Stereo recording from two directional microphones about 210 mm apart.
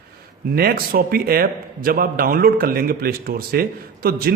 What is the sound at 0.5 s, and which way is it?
A man's voice, 45° right (ahead or behind).